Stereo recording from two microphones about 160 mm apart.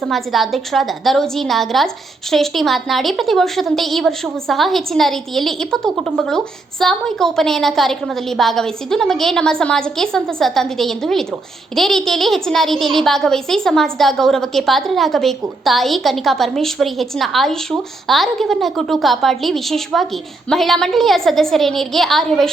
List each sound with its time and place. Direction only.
0.0 s a woman's voice: centre (ahead or behind)